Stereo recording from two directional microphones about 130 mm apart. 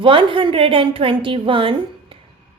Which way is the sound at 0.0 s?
40° right (ahead or behind).